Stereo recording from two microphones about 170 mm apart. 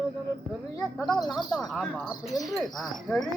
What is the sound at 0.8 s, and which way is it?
Speech, centre (ahead or behind).